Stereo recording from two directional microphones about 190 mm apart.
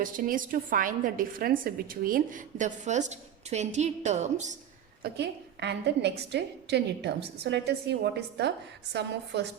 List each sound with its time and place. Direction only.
0.0 s a woman's voice: 45° right (ahead or behind)
5.0 s a woman's voice: 60° right (ahead or behind)